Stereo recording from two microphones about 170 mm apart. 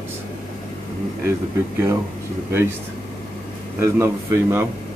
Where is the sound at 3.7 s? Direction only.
15° right (ahead or behind).